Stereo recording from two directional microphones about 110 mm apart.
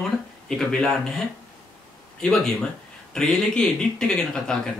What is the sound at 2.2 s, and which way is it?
A man's voice, 5° left (ahead or behind).